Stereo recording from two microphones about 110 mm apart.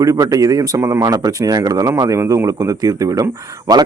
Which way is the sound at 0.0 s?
35° right (ahead or behind).